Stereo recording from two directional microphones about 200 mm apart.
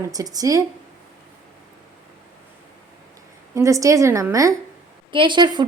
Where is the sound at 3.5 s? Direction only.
15° right (ahead or behind).